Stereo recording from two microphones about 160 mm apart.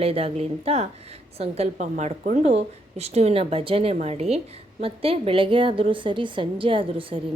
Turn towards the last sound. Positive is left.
turn(degrees=-35)  # may be behind; listen again after turning